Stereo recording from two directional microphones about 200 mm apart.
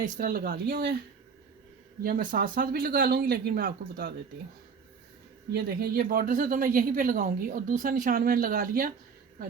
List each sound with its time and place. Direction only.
0.0 s a woman's voice: 40° right (ahead or behind)
2.3 s a woman's voice: 45° right (ahead or behind)
5.5 s a woman's voice: 50° right (ahead or behind)